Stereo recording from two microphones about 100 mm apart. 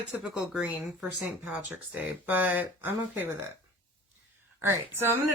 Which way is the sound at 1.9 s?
15° right (ahead or behind).